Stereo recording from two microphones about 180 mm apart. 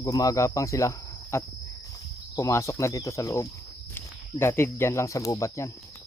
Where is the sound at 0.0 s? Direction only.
20° left (ahead or behind).